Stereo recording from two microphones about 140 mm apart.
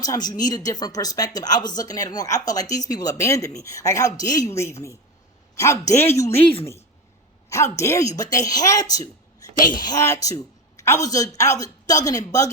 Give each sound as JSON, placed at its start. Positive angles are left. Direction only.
{"t": 0.0, "sound": "speech", "side_deg": 30}